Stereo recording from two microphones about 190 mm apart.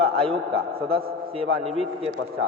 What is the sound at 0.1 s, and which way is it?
Speech, 30° right (ahead or behind).